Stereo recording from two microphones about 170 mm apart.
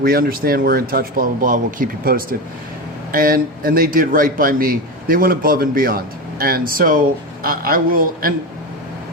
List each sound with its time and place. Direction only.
0.0 s a man's voice: 60° right (ahead or behind)